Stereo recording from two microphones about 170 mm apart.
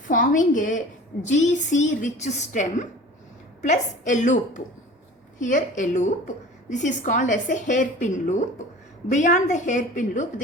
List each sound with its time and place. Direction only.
0.1 s a woman's voice: 50° left (ahead or behind)